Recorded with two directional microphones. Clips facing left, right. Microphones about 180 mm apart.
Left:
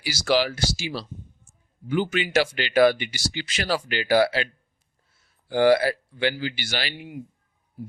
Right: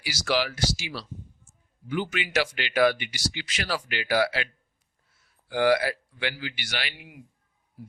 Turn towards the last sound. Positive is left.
turn(degrees=30)  # may be behind; listen again after turning